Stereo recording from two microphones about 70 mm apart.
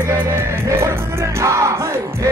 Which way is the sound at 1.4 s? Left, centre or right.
Right.